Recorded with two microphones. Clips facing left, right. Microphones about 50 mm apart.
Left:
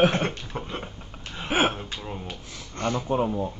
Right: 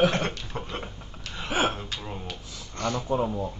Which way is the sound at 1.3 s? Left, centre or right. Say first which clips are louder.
Left 2 dB; left.